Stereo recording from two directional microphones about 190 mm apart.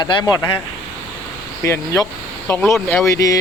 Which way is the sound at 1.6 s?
15° left (ahead or behind).